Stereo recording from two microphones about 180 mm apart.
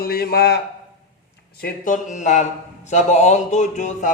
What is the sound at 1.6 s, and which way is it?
A man's voice, 45° left (ahead or behind).